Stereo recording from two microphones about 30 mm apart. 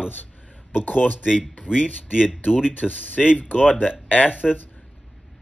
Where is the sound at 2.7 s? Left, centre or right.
Left.